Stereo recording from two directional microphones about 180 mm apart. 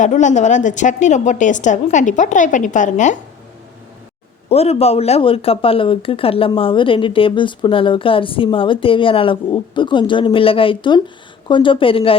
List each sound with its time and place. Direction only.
0.0 s a woman's voice: 45° left (ahead or behind)
4.4 s speech: 35° left (ahead or behind)